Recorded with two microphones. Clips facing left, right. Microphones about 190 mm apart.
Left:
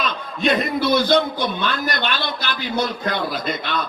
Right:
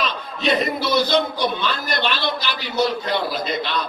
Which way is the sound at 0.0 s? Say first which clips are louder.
Left 1 dB; 50° left (ahead or behind).